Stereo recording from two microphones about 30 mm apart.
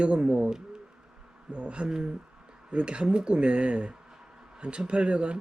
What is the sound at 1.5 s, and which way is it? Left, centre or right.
Speech, right.